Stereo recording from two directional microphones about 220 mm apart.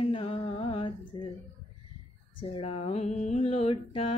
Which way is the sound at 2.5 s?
25° left (ahead or behind).